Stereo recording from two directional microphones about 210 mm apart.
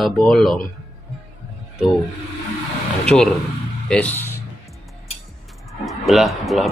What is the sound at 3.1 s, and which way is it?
Speech, 5° left (ahead or behind).